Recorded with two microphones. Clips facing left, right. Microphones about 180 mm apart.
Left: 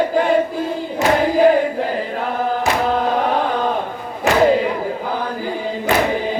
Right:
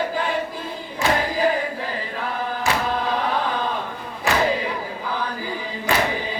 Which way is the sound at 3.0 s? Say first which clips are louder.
Left 5 dB; 50° left (ahead or behind).